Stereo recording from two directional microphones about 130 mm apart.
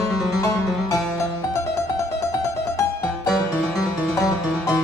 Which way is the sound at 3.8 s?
25° left (ahead or behind).